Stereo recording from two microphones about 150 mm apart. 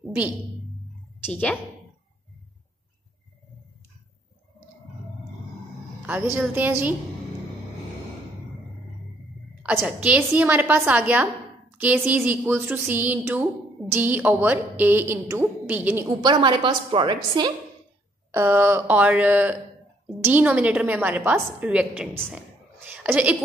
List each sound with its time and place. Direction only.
1.3 s a woman's voice: 5° left (ahead or behind)
6.0 s a woman's voice: 10° right (ahead or behind)
9.6 s a woman's voice: 10° right (ahead or behind)
16.2 s a woman's voice: 30° right (ahead or behind)
18.3 s a woman's voice: 15° right (ahead or behind)
22.3 s a sound: 10° right (ahead or behind)